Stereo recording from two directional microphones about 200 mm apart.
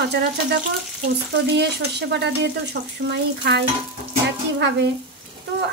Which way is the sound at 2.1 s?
60° right (ahead or behind).